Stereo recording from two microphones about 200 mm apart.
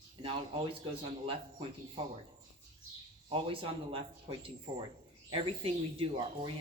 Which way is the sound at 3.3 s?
25° right (ahead or behind).